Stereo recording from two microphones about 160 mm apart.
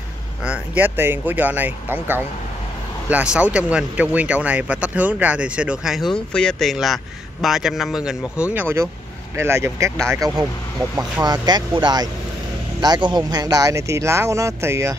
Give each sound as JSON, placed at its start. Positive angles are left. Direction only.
{"t": 0.4, "sound": "speech", "side_deg": -10}